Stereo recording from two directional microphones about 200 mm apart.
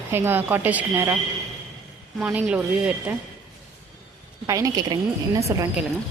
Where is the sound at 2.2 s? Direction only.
5° right (ahead or behind).